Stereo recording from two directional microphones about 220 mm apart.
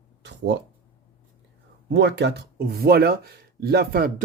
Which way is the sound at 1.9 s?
50° right (ahead or behind).